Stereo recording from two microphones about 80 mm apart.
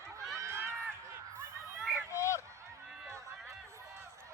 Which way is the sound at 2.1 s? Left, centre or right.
Left.